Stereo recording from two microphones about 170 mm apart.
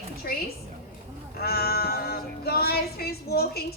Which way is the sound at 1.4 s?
65° left (ahead or behind).